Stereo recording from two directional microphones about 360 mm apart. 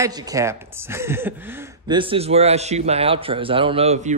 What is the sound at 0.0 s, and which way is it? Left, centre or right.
A man's voice, centre.